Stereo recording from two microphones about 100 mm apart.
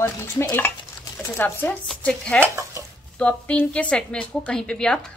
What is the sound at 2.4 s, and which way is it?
Stir, 30° right (ahead or behind).